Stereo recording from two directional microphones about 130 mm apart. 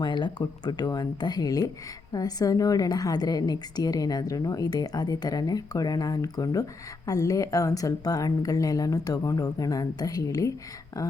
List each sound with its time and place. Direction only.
0.0 s a woman's voice: 35° left (ahead or behind)